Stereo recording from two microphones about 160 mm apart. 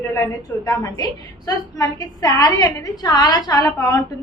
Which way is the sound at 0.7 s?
25° left (ahead or behind).